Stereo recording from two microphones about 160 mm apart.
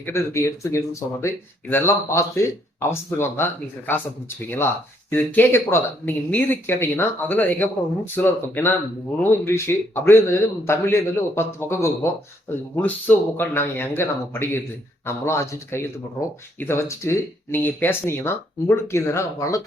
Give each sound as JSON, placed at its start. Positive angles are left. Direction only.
{"t": 0.0, "sound": "speech", "side_deg": 15}
{"t": 5.1, "sound": "speech", "side_deg": 10}